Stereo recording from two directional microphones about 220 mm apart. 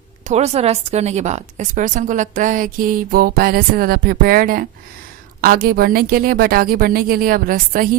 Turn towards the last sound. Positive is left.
turn(degrees=-40)  # may be behind; listen again after turning